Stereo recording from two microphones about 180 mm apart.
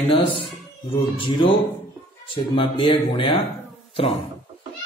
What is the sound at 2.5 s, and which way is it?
Speech, 30° left (ahead or behind).